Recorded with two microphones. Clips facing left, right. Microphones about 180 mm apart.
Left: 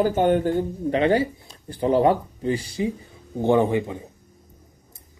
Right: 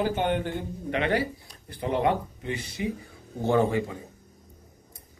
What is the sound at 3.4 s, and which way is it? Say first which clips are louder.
Speech: left 4 dB; 15° left (ahead or behind).